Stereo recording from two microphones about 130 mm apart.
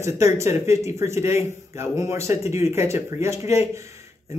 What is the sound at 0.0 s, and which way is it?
Speech, 20° right (ahead or behind).